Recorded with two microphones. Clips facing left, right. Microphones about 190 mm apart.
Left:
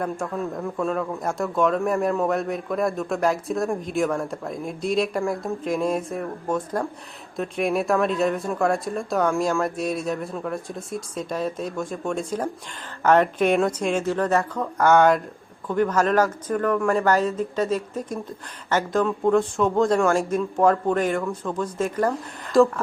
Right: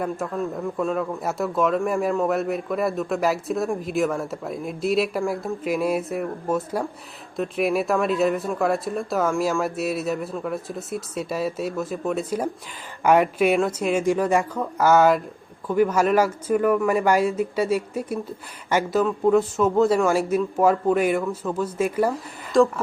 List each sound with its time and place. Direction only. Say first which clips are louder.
0.0 s a man's voice: right 1 dB; 5° right (ahead or behind)
22.5 s a man's voice: left 1 dB; centre (ahead or behind)